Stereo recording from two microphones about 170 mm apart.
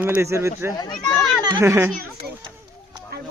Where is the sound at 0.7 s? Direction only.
25° left (ahead or behind).